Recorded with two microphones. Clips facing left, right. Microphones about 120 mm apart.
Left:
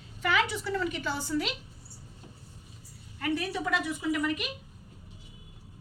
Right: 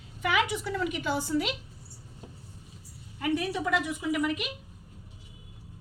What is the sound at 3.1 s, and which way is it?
A woman's voice, 10° right (ahead or behind).